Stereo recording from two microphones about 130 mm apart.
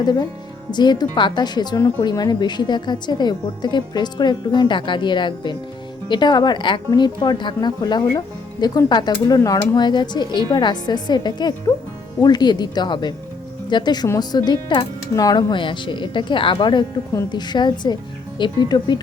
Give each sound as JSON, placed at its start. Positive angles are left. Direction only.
{"t": 0.0, "sound": "speech", "side_deg": 30}